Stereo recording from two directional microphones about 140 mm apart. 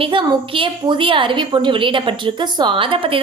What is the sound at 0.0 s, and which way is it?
A woman's voice, 40° right (ahead or behind).